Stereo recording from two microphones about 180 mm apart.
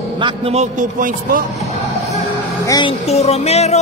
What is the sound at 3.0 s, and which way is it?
Music, 35° left (ahead or behind).